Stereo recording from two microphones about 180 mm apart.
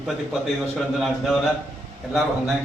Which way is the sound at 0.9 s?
Centre (ahead or behind).